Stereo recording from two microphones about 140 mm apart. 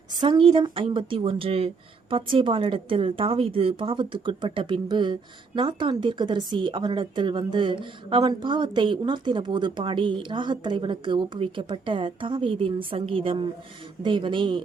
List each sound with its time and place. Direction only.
0.2 s a woman's voice: 35° right (ahead or behind)